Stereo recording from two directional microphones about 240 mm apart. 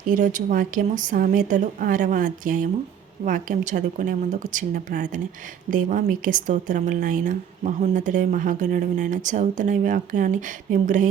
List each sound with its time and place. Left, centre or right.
0.1 s a woman's voice: right